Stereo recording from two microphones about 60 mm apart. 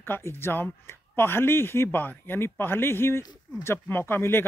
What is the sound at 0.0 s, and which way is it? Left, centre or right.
Speech, left.